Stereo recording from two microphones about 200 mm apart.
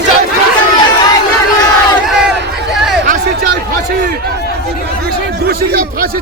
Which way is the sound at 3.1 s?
45° right (ahead or behind).